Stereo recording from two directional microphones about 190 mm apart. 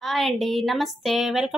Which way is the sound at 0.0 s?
Centre (ahead or behind).